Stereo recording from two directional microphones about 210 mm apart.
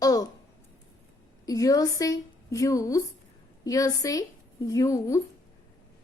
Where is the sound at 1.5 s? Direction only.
15° left (ahead or behind).